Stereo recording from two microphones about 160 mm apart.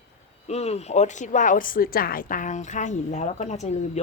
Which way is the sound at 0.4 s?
40° left (ahead or behind).